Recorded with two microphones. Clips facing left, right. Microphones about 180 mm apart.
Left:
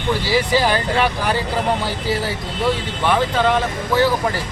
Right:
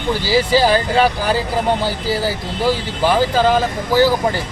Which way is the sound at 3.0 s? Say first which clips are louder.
Right 4 dB; 30° right (ahead or behind).